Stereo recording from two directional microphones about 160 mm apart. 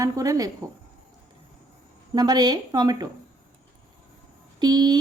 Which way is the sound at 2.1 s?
25° right (ahead or behind).